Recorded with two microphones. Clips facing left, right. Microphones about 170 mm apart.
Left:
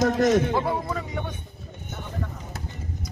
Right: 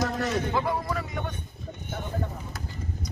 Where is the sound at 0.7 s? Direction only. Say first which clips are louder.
Left 1 dB; 25° left (ahead or behind).